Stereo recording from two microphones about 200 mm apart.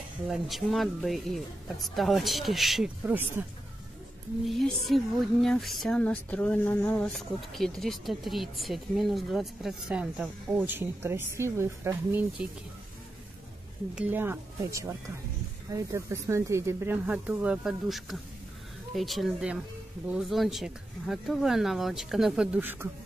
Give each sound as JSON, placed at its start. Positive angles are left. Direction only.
{"t": 0.3, "sound": "speech", "side_deg": 0}
{"t": 4.5, "sound": "speech", "side_deg": 0}
{"t": 13.9, "sound": "speech", "side_deg": -10}